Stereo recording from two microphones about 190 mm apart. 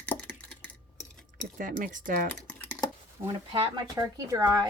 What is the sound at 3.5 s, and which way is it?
Speech, 30° right (ahead or behind).